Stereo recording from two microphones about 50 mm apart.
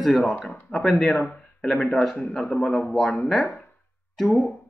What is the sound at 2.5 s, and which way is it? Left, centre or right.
Speech, centre.